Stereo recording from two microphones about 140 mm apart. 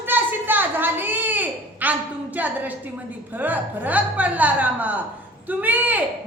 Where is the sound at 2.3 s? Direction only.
10° right (ahead or behind).